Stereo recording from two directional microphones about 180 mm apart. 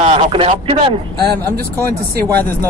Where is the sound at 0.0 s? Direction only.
35° right (ahead or behind).